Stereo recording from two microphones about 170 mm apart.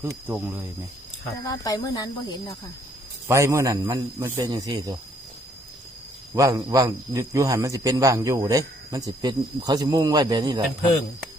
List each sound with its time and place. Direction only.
0.0 s speech: 10° right (ahead or behind)
1.5 s speech: 20° left (ahead or behind)
3.2 s a man's voice: 15° right (ahead or behind)
6.3 s a man's voice: 20° right (ahead or behind)